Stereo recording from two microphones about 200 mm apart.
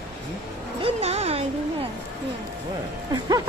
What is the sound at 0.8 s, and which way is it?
Music, 30° right (ahead or behind).